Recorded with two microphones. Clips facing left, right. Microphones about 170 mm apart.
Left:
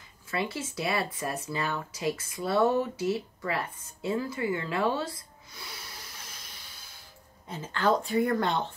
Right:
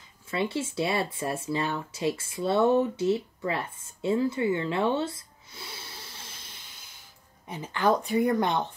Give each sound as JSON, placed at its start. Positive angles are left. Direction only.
{"t": 0.3, "sound": "speech", "side_deg": -25}
{"t": 7.4, "sound": "speech", "side_deg": -15}